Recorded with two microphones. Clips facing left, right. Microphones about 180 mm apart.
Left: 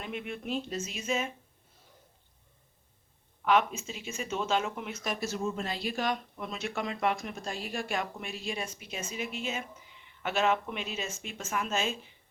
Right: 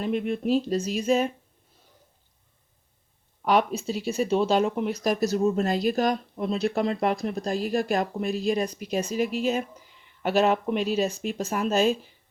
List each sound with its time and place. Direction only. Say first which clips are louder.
0.0 s speech: right 11 dB; 35° right (ahead or behind)
3.4 s speech: right 4 dB; 35° right (ahead or behind)